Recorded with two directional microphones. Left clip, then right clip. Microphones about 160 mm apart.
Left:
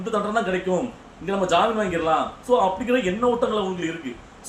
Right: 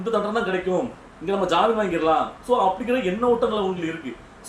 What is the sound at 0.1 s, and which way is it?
Speech, 5° left (ahead or behind).